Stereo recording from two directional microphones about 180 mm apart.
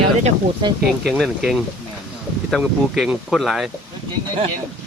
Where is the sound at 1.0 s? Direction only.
Centre (ahead or behind).